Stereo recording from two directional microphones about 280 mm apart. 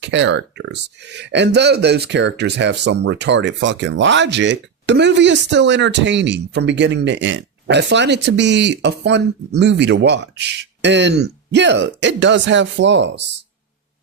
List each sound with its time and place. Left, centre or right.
0.0 s speech: right